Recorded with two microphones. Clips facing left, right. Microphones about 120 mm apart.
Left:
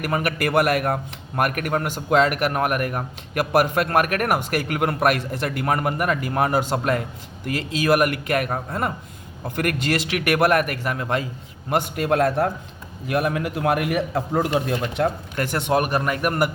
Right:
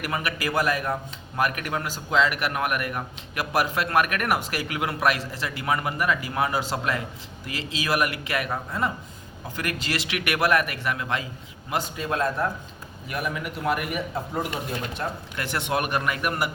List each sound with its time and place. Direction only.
0.0 s a man's voice: 50° left (ahead or behind)
1.4 s speech: 50° left (ahead or behind)
11.7 s a man's voice: 60° left (ahead or behind)
13.1 s a man's voice: 75° left (ahead or behind)
15.4 s a man's voice: 45° left (ahead or behind)